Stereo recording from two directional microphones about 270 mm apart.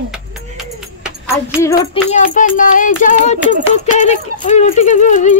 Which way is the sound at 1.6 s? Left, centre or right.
Centre.